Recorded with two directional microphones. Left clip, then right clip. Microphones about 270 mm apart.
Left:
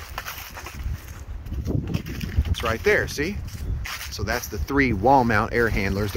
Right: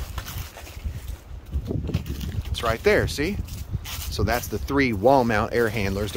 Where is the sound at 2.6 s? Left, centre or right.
Centre.